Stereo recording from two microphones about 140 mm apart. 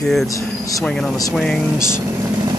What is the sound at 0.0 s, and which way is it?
Speech, centre (ahead or behind).